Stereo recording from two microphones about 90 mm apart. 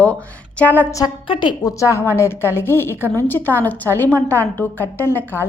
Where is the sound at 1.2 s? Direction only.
65° left (ahead or behind).